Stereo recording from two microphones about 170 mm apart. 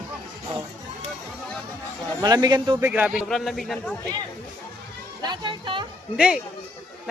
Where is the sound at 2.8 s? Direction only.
10° right (ahead or behind).